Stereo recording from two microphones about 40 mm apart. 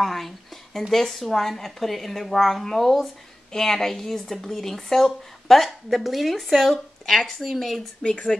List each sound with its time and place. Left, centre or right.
0.0 s a sound: centre
0.7 s speech: centre
8.0 s speech: left